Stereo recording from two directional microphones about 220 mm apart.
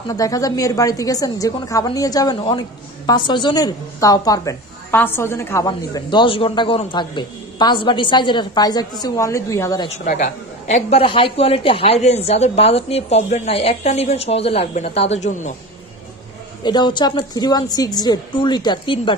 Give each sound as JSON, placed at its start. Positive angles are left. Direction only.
{"t": 0.1, "sound": "a woman's voice", "side_deg": 15}
{"t": 9.8, "sound": "a woman's voice", "side_deg": 30}
{"t": 16.6, "sound": "a woman's voice", "side_deg": 20}